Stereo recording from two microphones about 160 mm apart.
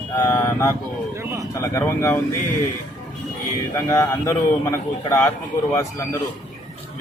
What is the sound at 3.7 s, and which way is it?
A man's voice, 20° left (ahead or behind).